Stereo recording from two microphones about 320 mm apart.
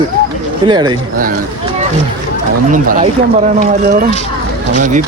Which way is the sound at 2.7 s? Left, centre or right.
Right.